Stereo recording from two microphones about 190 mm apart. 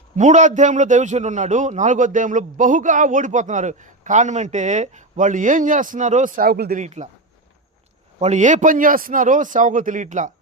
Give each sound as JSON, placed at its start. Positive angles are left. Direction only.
{"t": 0.2, "sound": "a man's voice", "side_deg": -40}
{"t": 6.8, "sound": "a man's voice", "side_deg": -35}
{"t": 8.2, "sound": "a man's voice", "side_deg": -40}